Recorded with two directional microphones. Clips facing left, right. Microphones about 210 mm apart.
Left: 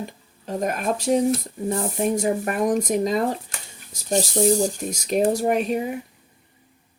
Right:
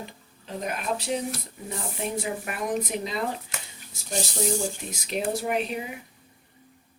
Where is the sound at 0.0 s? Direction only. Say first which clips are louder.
Left 7 dB; 45° left (ahead or behind).